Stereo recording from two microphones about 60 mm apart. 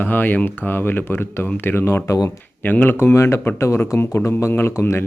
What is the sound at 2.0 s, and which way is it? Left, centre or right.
Speech, left.